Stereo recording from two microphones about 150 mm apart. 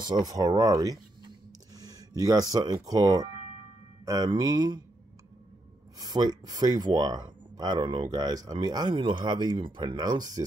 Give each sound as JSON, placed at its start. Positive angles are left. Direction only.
{"t": 0.0, "sound": "speech", "side_deg": -25}
{"t": 5.9, "sound": "speech", "side_deg": -25}